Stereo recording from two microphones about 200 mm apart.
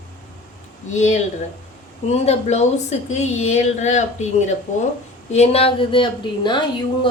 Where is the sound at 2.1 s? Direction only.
35° left (ahead or behind).